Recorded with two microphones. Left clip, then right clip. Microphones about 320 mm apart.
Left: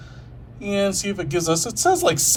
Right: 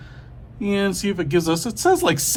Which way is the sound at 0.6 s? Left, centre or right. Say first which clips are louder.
Left 1 dB; centre.